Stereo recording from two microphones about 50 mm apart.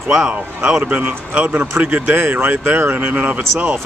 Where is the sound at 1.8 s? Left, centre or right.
Right.